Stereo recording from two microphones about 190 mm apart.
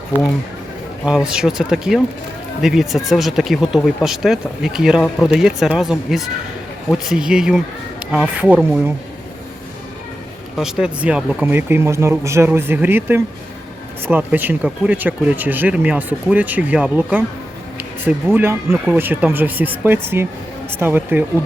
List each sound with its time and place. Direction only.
1.0 s speech: 5° right (ahead or behind)
10.6 s speech: 5° right (ahead or behind)